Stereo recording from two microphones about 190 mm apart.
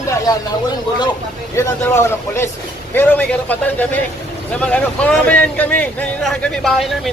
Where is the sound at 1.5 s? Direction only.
15° left (ahead or behind).